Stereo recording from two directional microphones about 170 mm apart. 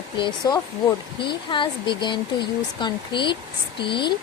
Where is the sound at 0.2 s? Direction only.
25° left (ahead or behind).